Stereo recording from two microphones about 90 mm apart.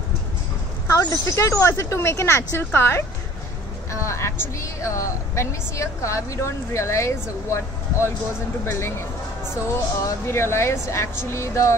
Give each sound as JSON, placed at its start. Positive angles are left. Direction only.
{"t": 0.8, "sound": "a woman's voice", "side_deg": 35}
{"t": 10.0, "sound": "a woman's voice", "side_deg": 30}